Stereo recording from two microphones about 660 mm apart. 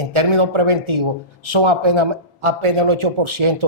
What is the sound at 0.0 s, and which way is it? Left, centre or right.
A man's voice, right.